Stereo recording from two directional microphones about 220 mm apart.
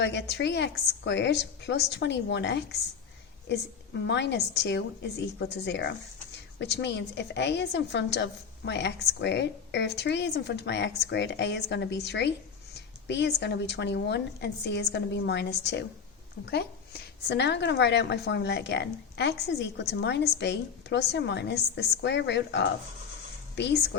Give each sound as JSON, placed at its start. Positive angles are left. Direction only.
{"t": 0.0, "sound": "a woman's voice", "side_deg": 50}
{"t": 4.0, "sound": "a woman's voice", "side_deg": 50}